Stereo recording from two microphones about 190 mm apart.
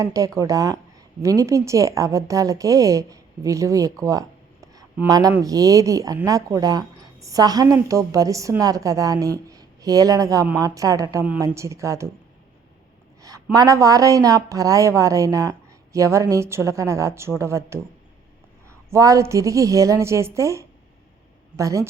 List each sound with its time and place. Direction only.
0.0 s a woman's voice: 15° right (ahead or behind)
4.0 s a sound: 15° right (ahead or behind)
5.3 s a woman's voice: 20° right (ahead or behind)
13.2 s a woman's voice: 20° right (ahead or behind)